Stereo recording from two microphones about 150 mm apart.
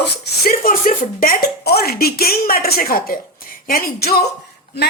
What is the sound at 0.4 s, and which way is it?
Speech, 70° left (ahead or behind).